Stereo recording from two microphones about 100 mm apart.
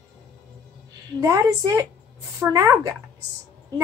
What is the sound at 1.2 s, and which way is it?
A woman's voice, 35° right (ahead or behind).